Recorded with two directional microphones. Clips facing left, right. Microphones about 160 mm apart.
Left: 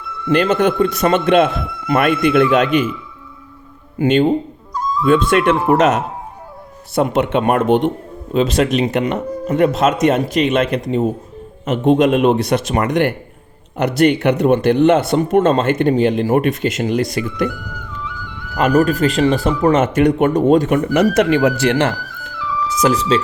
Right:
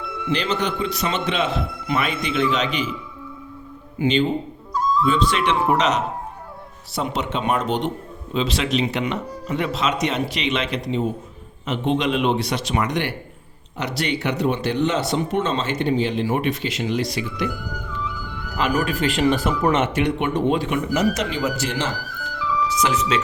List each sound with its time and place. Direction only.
0.3 s speech: 50° left (ahead or behind)
3.9 s a man's voice: 50° left (ahead or behind)
4.7 s dog: centre (ahead or behind)
5.0 s speech: 55° left (ahead or behind)
18.5 s speech: 40° left (ahead or behind); by 22.3 s 60° left (ahead or behind)
22.7 s speech: 40° left (ahead or behind)